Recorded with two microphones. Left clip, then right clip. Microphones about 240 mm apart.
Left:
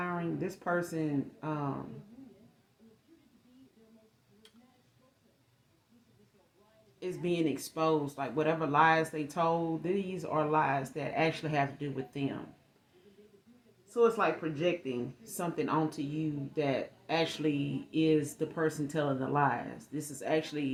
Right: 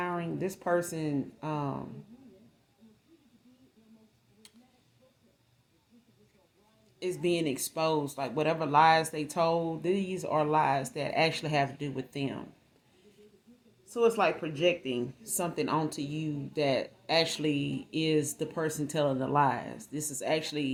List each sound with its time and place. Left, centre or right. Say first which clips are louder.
0.0 s speech: right 2 dB; right
7.0 s speech: right 3 dB; right
13.9 s speech: right 1 dB; right